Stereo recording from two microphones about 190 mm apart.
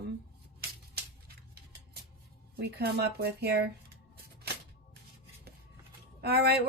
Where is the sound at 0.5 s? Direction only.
55° right (ahead or behind).